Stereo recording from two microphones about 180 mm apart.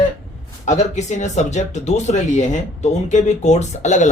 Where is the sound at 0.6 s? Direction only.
40° left (ahead or behind).